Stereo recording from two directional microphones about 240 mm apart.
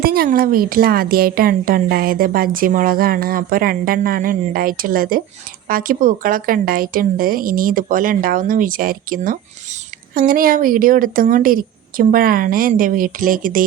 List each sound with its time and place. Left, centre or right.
0.0 s a woman's voice: right